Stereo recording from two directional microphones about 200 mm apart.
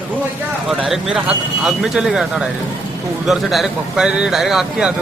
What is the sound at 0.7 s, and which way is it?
Speech, centre (ahead or behind).